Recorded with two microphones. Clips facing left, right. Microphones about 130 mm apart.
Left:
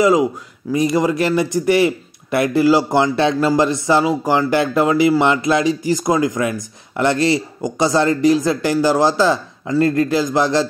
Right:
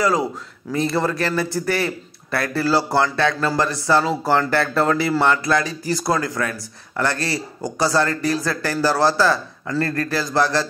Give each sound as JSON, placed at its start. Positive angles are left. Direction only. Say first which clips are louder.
{"t": 0.0, "sound": "a man's voice", "louder": "left 6 dB", "side_deg": 15}